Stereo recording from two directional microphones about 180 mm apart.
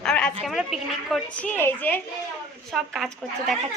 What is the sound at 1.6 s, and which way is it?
A woman's voice, 10° left (ahead or behind).